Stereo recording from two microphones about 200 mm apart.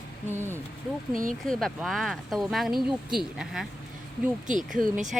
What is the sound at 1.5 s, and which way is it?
Speech, centre (ahead or behind).